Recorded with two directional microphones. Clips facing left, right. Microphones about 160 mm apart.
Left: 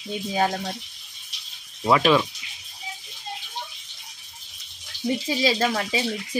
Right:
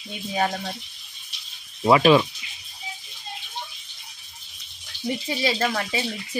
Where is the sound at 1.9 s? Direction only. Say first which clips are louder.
Right 3 dB; 10° right (ahead or behind).